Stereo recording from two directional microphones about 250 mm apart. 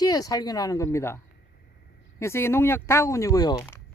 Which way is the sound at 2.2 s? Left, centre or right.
Centre.